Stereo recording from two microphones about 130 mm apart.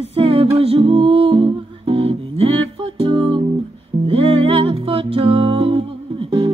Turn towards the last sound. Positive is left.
turn(degrees=-45)  # may be behind; listen again after turning